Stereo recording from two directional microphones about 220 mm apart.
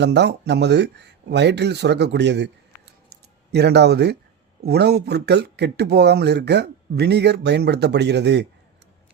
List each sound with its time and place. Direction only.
0.0 s speech: 50° right (ahead or behind)